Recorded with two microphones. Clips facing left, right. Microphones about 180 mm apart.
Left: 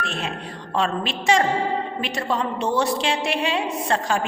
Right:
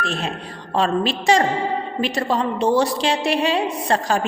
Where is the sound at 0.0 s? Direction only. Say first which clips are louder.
Right 3 dB; 35° right (ahead or behind).